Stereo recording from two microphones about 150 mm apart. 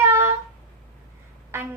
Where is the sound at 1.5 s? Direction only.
15° right (ahead or behind).